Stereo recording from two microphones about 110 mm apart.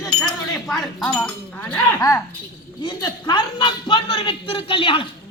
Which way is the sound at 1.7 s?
30° left (ahead or behind).